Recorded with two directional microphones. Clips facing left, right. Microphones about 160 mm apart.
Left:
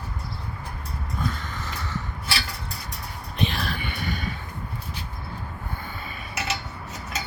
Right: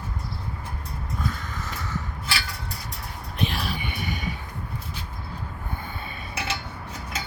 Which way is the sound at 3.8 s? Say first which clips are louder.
Left 1 dB; 15° right (ahead or behind).